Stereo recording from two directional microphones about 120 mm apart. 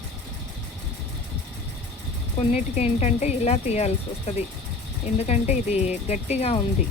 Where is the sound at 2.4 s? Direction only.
60° left (ahead or behind).